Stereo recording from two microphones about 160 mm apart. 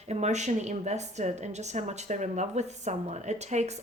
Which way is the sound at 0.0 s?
45° right (ahead or behind).